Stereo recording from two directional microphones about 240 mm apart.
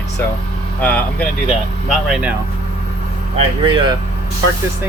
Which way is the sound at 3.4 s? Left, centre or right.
Right.